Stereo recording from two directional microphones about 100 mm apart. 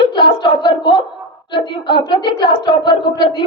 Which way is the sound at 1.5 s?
50° left (ahead or behind).